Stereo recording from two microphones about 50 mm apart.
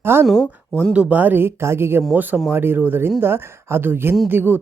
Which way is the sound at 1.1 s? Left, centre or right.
Right.